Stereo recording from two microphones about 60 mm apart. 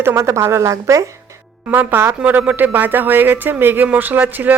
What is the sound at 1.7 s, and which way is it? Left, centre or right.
Speech, right.